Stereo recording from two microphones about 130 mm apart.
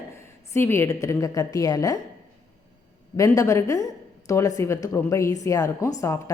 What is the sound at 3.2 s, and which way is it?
A woman's voice, 25° left (ahead or behind).